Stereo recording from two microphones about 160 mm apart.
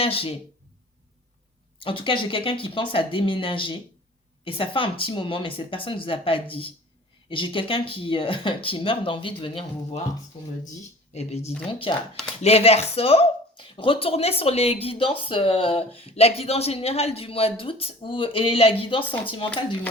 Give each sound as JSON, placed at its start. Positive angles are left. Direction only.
{"t": 0.0, "sound": "speech", "side_deg": 35}
{"t": 1.8, "sound": "speech", "side_deg": 30}
{"t": 11.1, "sound": "speech", "side_deg": 45}